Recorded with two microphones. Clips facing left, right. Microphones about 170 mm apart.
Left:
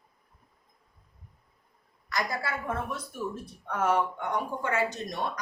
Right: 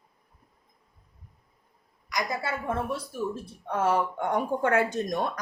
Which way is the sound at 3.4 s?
30° right (ahead or behind).